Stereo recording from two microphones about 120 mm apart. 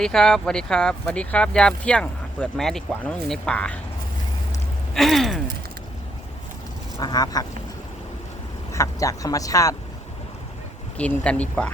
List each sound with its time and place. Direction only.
0.0 s speech: 5° left (ahead or behind)
4.9 s speech: centre (ahead or behind)
7.0 s duck: 35° left (ahead or behind)
8.7 s speech: 25° left (ahead or behind)
10.9 s speech: 10° left (ahead or behind)